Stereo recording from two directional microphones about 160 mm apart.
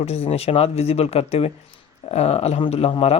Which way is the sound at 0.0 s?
40° left (ahead or behind).